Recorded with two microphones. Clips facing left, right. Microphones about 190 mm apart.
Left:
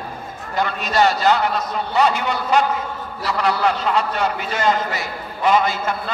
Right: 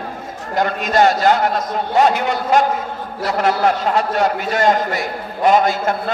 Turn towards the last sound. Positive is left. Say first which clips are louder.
# right 5 dB
turn(degrees=-50)  # may be behind; listen again after turning